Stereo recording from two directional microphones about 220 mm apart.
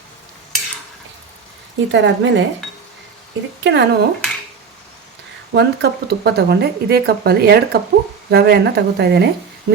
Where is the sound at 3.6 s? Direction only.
55° right (ahead or behind).